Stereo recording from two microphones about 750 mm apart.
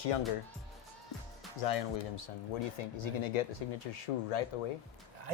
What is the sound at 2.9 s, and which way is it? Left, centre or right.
Speech, left.